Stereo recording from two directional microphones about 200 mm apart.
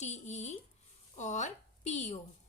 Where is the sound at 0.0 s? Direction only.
35° left (ahead or behind).